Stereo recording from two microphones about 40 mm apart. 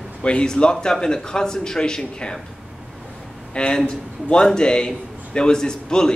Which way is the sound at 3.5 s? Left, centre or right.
Left.